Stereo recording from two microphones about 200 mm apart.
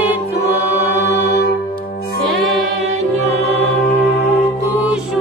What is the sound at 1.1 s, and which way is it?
Music, 55° left (ahead or behind).